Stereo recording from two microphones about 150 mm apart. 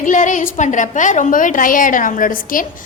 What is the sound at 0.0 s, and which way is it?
A woman's voice, 60° left (ahead or behind).